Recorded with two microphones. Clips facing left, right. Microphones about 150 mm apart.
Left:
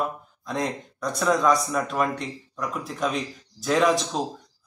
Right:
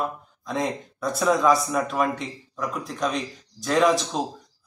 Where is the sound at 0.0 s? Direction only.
Centre (ahead or behind).